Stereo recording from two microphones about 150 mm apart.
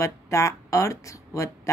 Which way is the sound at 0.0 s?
20° left (ahead or behind).